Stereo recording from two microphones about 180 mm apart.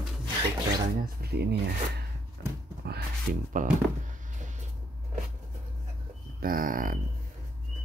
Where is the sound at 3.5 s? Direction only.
45° right (ahead or behind).